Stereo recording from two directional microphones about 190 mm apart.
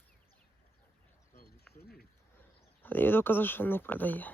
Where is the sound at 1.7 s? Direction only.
55° left (ahead or behind).